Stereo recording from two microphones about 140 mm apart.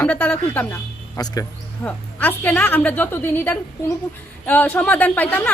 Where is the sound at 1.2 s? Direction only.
30° left (ahead or behind).